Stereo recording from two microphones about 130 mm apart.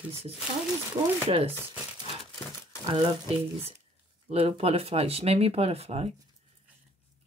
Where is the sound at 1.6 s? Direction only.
20° right (ahead or behind).